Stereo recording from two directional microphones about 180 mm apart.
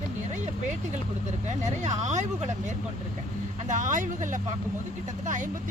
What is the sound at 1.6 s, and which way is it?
Speech, 40° right (ahead or behind).